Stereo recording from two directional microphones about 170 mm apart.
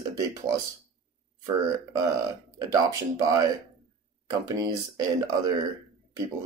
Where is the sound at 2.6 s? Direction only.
20° right (ahead or behind).